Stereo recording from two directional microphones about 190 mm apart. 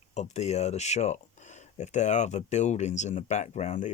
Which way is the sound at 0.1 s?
35° left (ahead or behind).